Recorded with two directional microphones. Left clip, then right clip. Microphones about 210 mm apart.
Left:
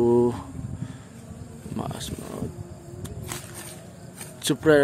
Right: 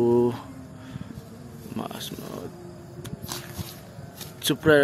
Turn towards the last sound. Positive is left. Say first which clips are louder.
# even
turn(degrees=10)  # may be behind; listen again after turning